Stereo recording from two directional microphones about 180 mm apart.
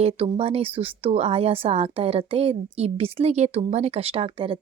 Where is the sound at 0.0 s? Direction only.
30° right (ahead or behind).